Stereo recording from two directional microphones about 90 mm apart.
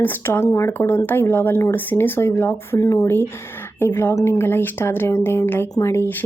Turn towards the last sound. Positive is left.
turn(degrees=25)  # may be behind; listen again after turning